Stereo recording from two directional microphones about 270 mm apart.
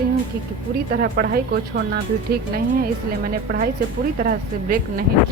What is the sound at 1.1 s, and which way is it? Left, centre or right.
Speech, right.